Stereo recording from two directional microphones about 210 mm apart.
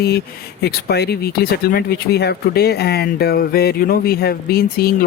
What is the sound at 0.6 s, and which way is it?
Speech, 50° left (ahead or behind).